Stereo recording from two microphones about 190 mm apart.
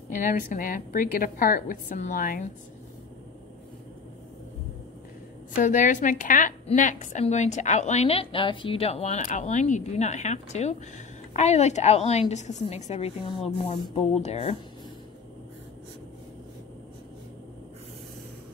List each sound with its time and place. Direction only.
0.1 s a woman's voice: 45° left (ahead or behind)
5.6 s a woman's voice: 40° left (ahead or behind)